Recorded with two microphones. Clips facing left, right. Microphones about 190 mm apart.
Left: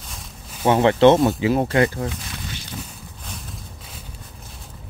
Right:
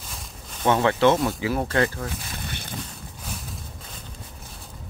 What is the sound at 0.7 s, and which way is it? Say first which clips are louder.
Speech: left 7 dB; 25° left (ahead or behind).